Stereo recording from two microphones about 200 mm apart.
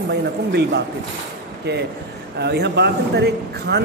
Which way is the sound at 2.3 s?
55° right (ahead or behind).